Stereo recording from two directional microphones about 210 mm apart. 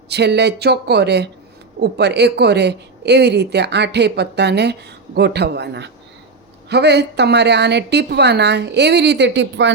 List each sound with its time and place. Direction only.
0.1 s speech: 55° right (ahead or behind)